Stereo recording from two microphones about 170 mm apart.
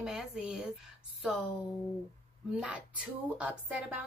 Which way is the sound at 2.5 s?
5° right (ahead or behind).